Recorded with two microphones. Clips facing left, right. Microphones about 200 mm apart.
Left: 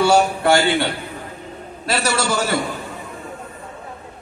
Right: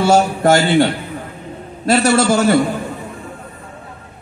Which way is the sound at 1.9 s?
50° right (ahead or behind).